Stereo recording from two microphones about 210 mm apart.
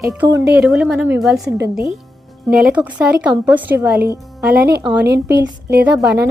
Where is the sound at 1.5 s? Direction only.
50° right (ahead or behind).